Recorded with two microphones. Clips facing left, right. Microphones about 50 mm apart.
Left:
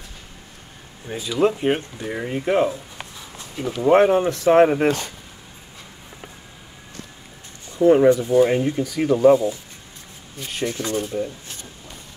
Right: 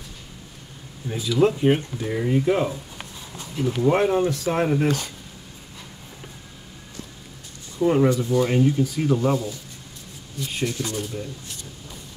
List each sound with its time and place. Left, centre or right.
1.0 s speech: left
3.9 s speech: left
4.6 s speech: left
7.7 s speech: left
8.8 s speech: left
9.1 s speech: left
10.3 s speech: left